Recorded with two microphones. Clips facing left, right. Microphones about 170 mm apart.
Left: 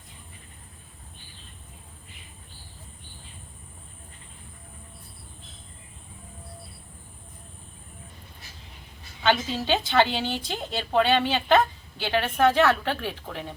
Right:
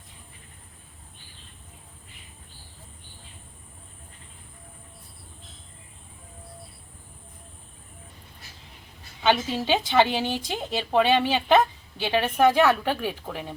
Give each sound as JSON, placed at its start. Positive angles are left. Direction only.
{"t": 9.2, "sound": "a woman's voice", "side_deg": -15}